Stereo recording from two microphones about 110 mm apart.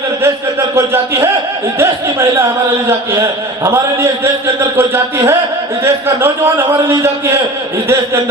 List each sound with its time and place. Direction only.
1.8 s a man's voice: 25° right (ahead or behind)